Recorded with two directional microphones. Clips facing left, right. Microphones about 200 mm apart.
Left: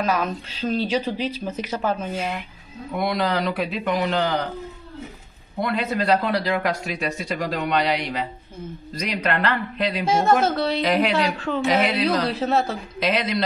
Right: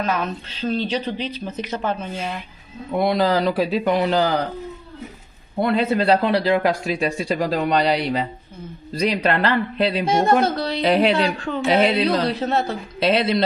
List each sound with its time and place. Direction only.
0.0 s speech: 10° left (ahead or behind)
2.9 s speech: 30° right (ahead or behind)
5.6 s speech: 30° right (ahead or behind)
11.3 s a woman's voice: centre (ahead or behind)
11.6 s speech: 25° right (ahead or behind)
12.3 s a woman's voice: 5° left (ahead or behind)
13.0 s speech: 30° right (ahead or behind)